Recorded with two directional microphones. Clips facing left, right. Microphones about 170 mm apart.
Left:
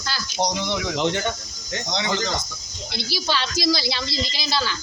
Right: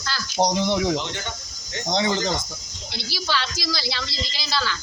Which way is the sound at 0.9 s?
70° left (ahead or behind).